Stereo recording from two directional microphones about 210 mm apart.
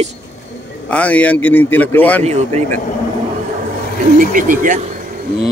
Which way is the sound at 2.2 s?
30° right (ahead or behind).